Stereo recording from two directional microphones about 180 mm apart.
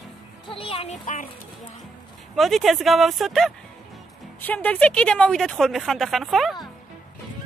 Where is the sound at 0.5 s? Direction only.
30° left (ahead or behind).